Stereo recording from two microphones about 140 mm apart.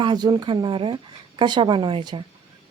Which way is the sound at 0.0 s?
30° right (ahead or behind).